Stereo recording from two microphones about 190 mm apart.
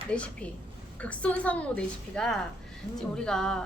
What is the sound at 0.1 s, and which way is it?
A woman's voice, 5° left (ahead or behind).